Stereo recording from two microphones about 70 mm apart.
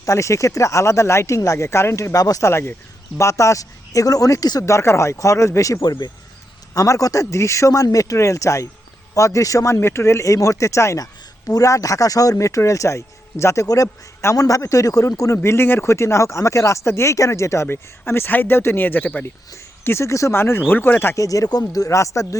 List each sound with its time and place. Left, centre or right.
0.0 s speech: left
2.1 s speech: left
2.5 s speech: left
4.6 s speech: left
5.8 s speech: left
6.7 s speech: left
11.0 s speech: left
15.4 s speech: left
19.8 s speech: left
21.2 s speech: left